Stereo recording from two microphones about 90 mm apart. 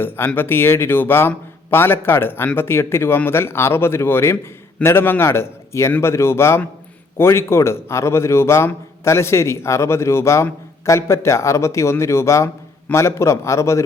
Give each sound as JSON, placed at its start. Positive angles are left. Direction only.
{"t": 0.3, "sound": "a man's voice", "side_deg": 25}